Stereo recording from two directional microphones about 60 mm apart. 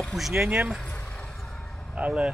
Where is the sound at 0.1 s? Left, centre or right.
Right.